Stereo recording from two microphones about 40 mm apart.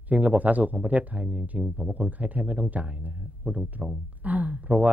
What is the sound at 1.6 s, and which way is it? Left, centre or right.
Speech, centre.